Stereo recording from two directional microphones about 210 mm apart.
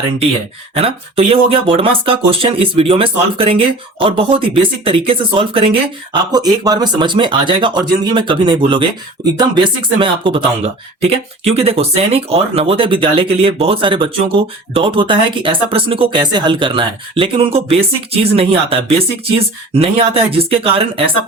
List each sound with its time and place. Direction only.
0.7 s speech: 30° right (ahead or behind)